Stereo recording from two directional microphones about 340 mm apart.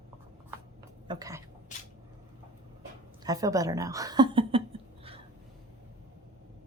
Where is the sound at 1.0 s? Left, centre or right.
Centre.